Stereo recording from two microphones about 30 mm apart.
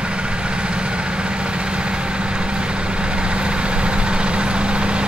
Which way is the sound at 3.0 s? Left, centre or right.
Right.